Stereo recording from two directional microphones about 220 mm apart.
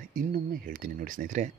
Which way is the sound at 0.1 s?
40° right (ahead or behind).